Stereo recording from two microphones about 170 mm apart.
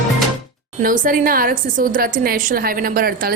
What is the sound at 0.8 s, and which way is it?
A woman's voice, 55° right (ahead or behind).